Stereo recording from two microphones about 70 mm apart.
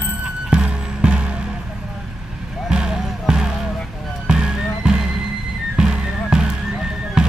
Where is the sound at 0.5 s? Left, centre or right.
Centre.